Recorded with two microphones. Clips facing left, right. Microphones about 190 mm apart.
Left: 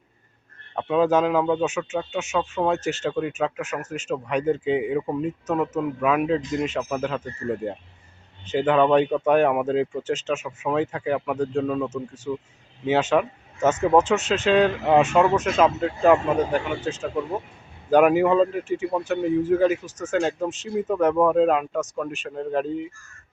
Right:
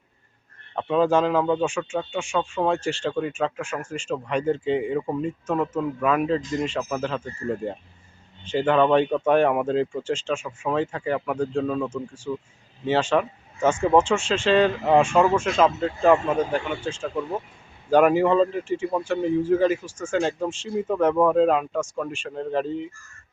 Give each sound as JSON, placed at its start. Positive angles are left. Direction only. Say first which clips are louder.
{"t": 0.8, "sound": "speech", "louder": "even", "side_deg": 5}
{"t": 19.8, "sound": "speech", "louder": "even", "side_deg": 20}
{"t": 20.1, "sound": "speech", "louder": "left 1 dB", "side_deg": 5}